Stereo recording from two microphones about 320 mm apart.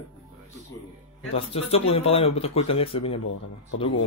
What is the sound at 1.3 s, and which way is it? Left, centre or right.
Speech, centre.